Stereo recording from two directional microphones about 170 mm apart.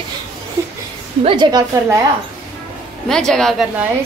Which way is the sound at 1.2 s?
30° right (ahead or behind).